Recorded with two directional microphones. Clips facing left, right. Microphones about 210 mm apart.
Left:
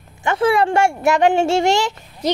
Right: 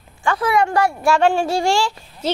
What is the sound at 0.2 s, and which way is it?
A woman's voice, 25° left (ahead or behind).